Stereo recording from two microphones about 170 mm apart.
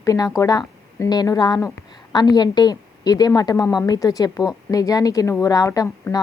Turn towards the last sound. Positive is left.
turn(degrees=20)  # may be behind; listen again after turning